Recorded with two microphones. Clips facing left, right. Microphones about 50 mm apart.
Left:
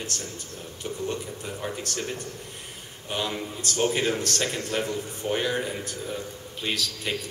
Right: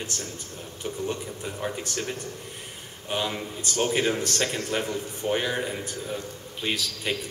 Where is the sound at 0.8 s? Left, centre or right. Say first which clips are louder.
Even; centre.